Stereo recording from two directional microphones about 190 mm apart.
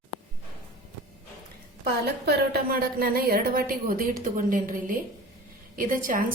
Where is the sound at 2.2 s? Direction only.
55° right (ahead or behind).